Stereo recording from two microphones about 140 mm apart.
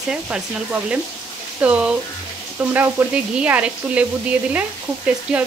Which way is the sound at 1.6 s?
10° right (ahead or behind).